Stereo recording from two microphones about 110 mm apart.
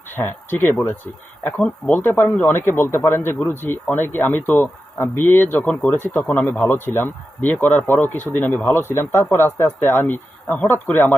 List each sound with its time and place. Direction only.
0.1 s speech: 20° left (ahead or behind)